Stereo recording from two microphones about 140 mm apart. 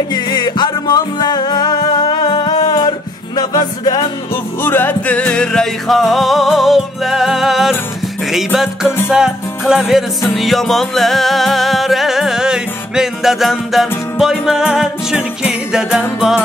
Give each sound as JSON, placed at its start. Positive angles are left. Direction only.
{"t": 0.1, "sound": "music", "side_deg": 30}
{"t": 4.6, "sound": "music", "side_deg": 15}
{"t": 9.1, "sound": "music", "side_deg": -5}